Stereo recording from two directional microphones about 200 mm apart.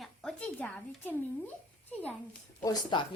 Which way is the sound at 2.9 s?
20° left (ahead or behind).